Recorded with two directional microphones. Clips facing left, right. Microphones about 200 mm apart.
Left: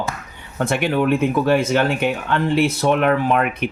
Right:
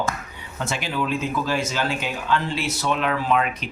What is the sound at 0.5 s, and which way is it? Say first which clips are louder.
Speech: left 8 dB; 55° left (ahead or behind).